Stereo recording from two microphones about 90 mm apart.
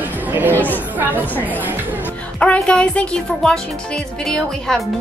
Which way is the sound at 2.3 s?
10° left (ahead or behind).